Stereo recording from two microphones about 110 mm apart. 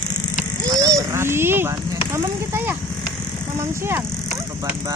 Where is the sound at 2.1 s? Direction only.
20° right (ahead or behind).